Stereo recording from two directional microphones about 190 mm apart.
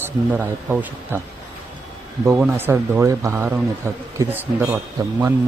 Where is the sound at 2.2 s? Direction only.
10° right (ahead or behind).